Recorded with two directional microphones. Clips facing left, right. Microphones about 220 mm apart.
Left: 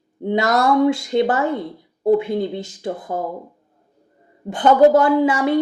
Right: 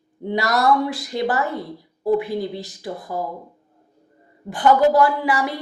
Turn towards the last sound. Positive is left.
turn(degrees=20)  # may be behind; listen again after turning